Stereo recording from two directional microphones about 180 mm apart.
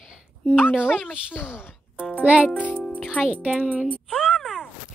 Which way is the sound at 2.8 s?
Centre (ahead or behind).